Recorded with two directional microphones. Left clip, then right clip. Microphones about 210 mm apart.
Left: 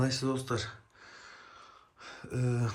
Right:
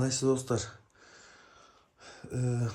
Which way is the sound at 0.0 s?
15° right (ahead or behind).